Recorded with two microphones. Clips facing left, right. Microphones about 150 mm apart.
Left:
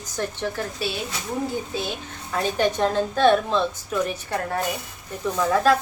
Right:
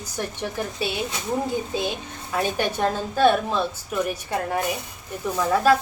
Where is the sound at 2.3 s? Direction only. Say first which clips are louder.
Left 2 dB; 10° right (ahead or behind).